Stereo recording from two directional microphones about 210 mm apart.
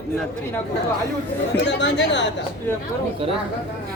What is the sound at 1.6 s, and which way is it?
Speech, 60° left (ahead or behind).